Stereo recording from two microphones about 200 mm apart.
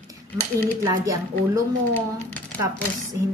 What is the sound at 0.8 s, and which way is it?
Speech, 15° right (ahead or behind).